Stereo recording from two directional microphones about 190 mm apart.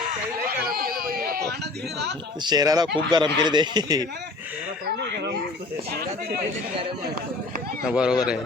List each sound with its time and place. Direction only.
0.6 s speech: 50° right (ahead or behind)
2.4 s speech: 20° right (ahead or behind)
4.9 s speech: 65° right (ahead or behind)
7.9 s speech: 5° right (ahead or behind)